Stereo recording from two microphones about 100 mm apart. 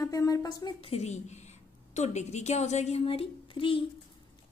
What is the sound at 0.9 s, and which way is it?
Speech, 90° left.